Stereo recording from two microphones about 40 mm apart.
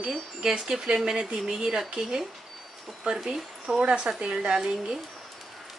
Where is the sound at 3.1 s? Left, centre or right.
Centre.